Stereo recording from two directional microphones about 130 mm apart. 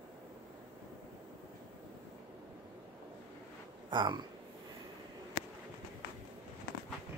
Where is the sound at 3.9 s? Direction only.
35° right (ahead or behind).